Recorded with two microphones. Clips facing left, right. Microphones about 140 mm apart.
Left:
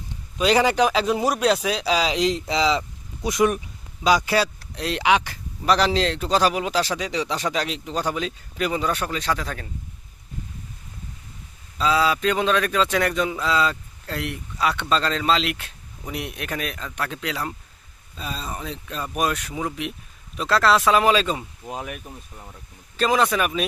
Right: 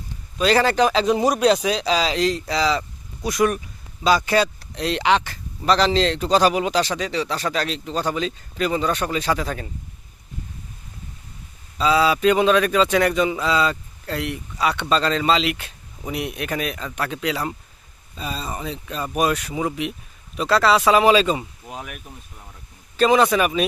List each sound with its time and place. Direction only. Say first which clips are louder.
0.3 s speech: right 1 dB; 15° left (ahead or behind)
4.0 s speech: right 1 dB; 10° left (ahead or behind)
9.0 s a man's voice: right 3 dB; 5° right (ahead or behind)
11.8 s a man's voice: right 3 dB; centre (ahead or behind)